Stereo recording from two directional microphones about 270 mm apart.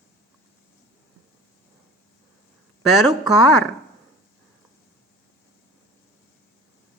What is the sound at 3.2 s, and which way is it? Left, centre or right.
Speech, left.